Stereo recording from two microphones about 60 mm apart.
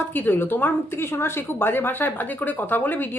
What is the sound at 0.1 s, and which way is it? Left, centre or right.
A woman's voice, left.